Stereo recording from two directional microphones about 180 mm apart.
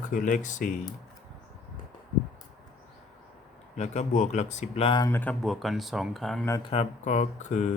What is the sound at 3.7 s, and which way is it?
Speech, 40° left (ahead or behind).